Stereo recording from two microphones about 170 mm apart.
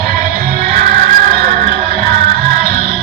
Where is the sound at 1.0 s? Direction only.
55° right (ahead or behind).